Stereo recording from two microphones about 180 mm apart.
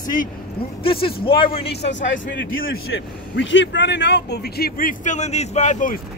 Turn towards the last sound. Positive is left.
turn(degrees=45)  # may be behind; listen again after turning